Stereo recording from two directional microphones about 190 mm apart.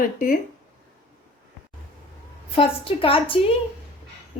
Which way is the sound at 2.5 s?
30° left (ahead or behind).